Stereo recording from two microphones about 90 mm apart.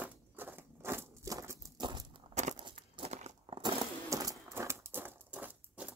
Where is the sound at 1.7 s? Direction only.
60° right (ahead or behind).